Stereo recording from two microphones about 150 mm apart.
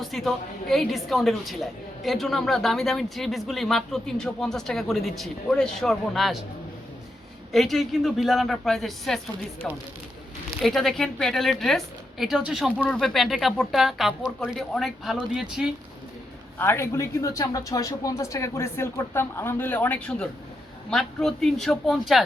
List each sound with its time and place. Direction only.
0.0 s speech: centre (ahead or behind)
7.5 s speech: centre (ahead or behind)
16.6 s speech: 15° left (ahead or behind); by 22.2 s centre (ahead or behind)